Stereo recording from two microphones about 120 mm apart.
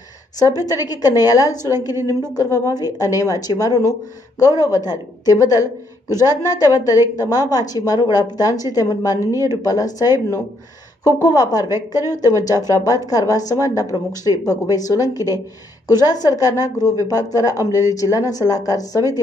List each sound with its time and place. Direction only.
0.4 s a woman's voice: 30° left (ahead or behind)